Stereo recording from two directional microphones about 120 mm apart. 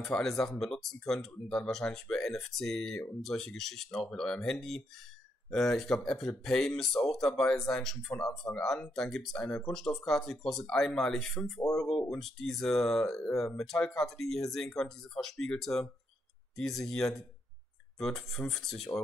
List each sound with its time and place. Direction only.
0.0 s speech: 5° left (ahead or behind)